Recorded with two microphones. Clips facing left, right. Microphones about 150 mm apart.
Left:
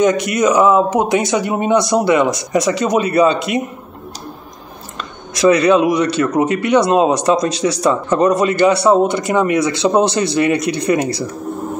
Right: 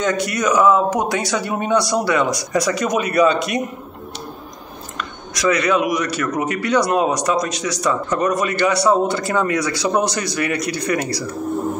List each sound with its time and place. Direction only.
0.0 s speech: 20° left (ahead or behind)
5.3 s speech: 30° left (ahead or behind)